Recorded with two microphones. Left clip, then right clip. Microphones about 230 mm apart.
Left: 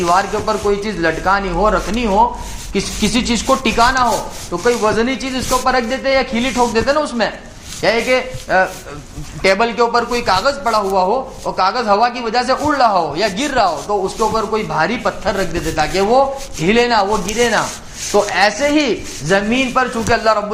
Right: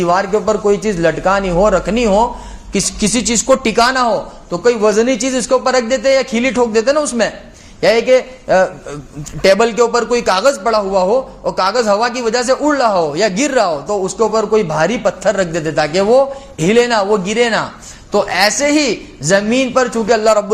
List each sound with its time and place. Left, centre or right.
0.0 s a man's voice: right